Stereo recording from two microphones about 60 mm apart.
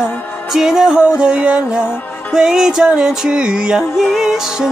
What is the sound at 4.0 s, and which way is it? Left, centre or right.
Music, centre.